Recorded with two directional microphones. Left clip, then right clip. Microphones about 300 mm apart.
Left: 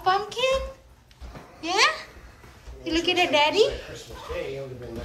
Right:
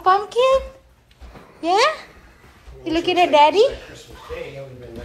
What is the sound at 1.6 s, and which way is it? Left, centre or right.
A woman's voice, centre.